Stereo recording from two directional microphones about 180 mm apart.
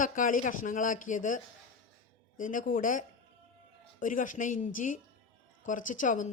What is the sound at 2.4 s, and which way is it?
Speech, 50° left (ahead or behind).